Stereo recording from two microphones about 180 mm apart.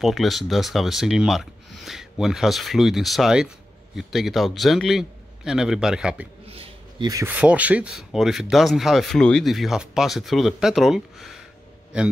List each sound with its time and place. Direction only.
0.0 s speech: centre (ahead or behind)
6.4 s a sound: 30° right (ahead or behind)
7.1 s speech: 20° right (ahead or behind)
7.3 s speech: 5° right (ahead or behind)